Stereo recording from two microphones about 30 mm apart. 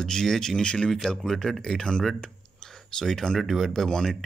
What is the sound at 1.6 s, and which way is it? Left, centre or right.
Speech, left.